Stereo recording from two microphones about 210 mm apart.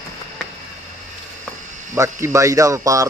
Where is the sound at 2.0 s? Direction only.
15° right (ahead or behind).